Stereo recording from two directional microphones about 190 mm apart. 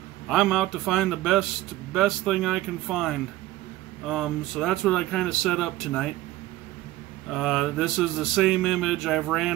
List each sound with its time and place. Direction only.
0.3 s speech: centre (ahead or behind)
7.2 s speech: centre (ahead or behind)